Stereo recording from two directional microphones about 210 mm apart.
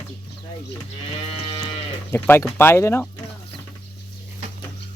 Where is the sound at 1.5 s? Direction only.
30° left (ahead or behind).